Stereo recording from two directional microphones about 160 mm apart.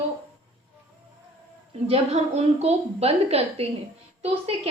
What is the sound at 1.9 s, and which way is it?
A woman's voice, 40° right (ahead or behind).